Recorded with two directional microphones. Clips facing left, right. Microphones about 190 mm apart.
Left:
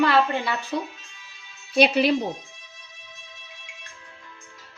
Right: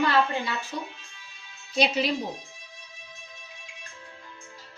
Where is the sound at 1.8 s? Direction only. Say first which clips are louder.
Left 6 dB; 60° left (ahead or behind).